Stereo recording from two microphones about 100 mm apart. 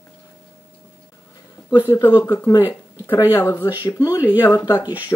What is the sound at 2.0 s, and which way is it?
A woman's voice, 30° left (ahead or behind).